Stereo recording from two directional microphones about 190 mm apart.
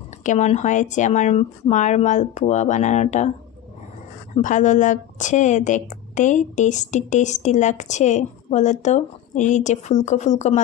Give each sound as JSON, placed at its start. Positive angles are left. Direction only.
{"t": 0.2, "sound": "a woman's voice", "side_deg": 40}
{"t": 4.4, "sound": "a woman's voice", "side_deg": 40}